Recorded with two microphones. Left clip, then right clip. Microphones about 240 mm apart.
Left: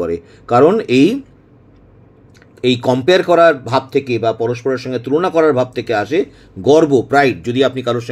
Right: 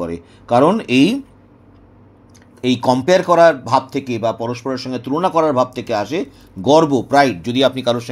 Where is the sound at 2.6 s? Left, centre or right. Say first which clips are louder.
Left 2 dB; centre.